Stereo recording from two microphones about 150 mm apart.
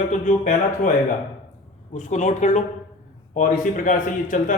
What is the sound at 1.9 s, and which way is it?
A man's voice, 55° left (ahead or behind).